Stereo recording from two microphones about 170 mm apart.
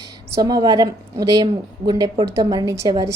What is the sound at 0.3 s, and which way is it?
A woman's voice, 20° right (ahead or behind).